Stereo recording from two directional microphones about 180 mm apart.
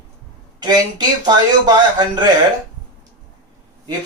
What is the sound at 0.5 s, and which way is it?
Speech, 25° right (ahead or behind).